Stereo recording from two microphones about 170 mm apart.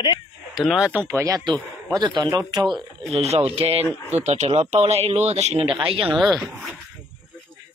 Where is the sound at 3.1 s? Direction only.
40° right (ahead or behind).